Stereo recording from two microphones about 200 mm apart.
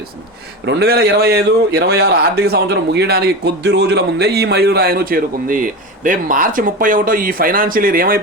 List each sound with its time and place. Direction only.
0.6 s a man's voice: 55° right (ahead or behind)